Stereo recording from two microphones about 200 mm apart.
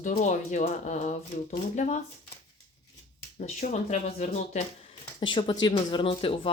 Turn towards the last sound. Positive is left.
turn(degrees=30)  # may be behind; listen again after turning